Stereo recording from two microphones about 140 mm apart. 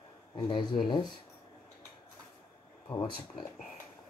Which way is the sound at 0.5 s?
35° left (ahead or behind).